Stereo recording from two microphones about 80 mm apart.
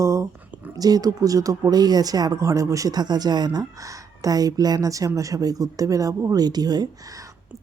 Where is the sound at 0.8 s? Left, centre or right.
Right.